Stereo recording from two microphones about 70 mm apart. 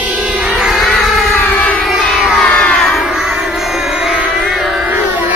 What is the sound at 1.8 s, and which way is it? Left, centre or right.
Music, centre.